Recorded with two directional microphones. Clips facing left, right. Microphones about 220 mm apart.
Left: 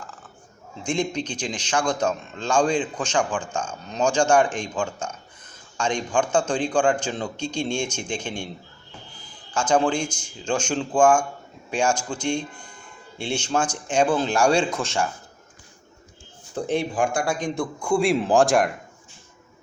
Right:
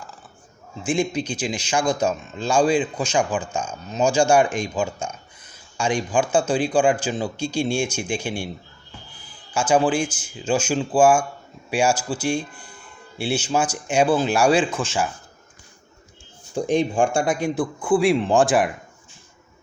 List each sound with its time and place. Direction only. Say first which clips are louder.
0.8 s speech: right 3 dB; 5° right (ahead or behind)
9.5 s speech: right 2 dB; 10° right (ahead or behind)
16.6 s speech: right 4 dB; 15° right (ahead or behind)
16.9 s a man's voice: right 3 dB; 30° right (ahead or behind)
17.2 s a man's voice: right 3 dB; 10° right (ahead or behind)